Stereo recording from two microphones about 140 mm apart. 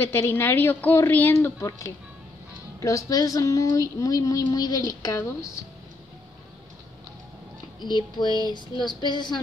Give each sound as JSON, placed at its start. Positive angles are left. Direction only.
{"t": 0.0, "sound": "a woman's voice", "side_deg": 15}
{"t": 7.8, "sound": "speech", "side_deg": 30}